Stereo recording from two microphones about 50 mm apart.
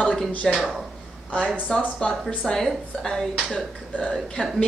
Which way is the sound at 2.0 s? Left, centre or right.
Centre.